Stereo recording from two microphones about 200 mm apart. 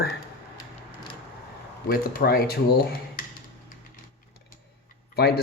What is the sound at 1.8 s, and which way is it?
Speech, 50° left (ahead or behind).